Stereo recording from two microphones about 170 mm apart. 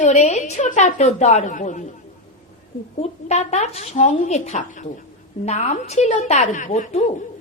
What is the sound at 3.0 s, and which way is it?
A woman's voice, 40° left (ahead or behind).